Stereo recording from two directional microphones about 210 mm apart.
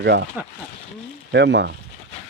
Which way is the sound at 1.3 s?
55° right (ahead or behind).